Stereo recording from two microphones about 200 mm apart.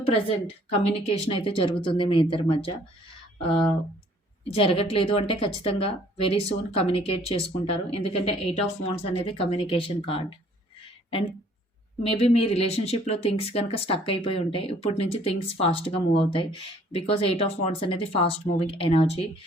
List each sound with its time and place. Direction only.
0.0 s speech: 30° left (ahead or behind)
4.5 s speech: 25° left (ahead or behind)
12.0 s speech: 25° left (ahead or behind)